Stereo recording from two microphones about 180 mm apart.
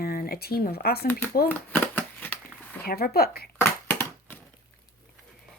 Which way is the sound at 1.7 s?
10° left (ahead or behind).